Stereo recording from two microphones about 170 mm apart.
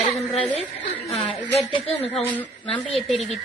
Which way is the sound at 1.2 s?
30° left (ahead or behind).